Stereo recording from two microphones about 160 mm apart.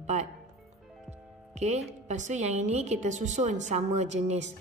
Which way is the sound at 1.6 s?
45° right (ahead or behind).